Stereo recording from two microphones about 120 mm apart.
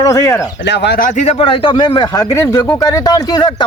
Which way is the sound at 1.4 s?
45° left (ahead or behind).